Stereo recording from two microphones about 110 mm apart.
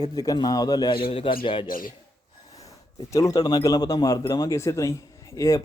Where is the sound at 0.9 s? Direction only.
55° left (ahead or behind).